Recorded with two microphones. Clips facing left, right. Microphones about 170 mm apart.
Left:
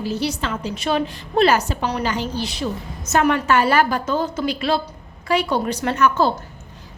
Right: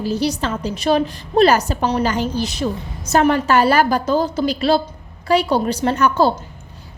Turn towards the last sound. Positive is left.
turn(degrees=-35)  # may be behind; listen again after turning